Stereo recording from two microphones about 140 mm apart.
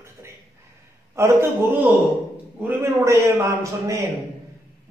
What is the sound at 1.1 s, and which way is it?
Speech, 20° right (ahead or behind).